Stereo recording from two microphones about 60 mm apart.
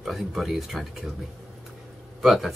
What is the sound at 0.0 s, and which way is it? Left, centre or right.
Speech, centre.